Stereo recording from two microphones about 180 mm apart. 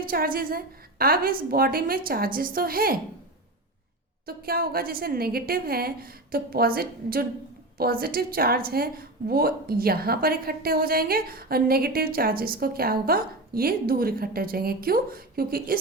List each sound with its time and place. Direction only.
0.0 s a woman's voice: 55° right (ahead or behind)
4.3 s a woman's voice: 55° right (ahead or behind)